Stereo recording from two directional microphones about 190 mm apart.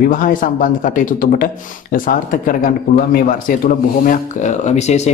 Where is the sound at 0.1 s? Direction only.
45° left (ahead or behind).